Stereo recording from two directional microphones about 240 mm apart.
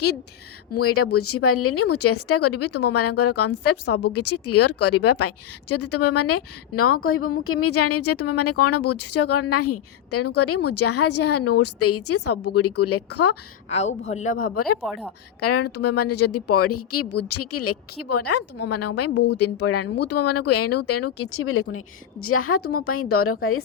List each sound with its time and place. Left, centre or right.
1.1 s speech: left
13.7 s speech: left
14.8 s speech: centre
15.4 s speech: left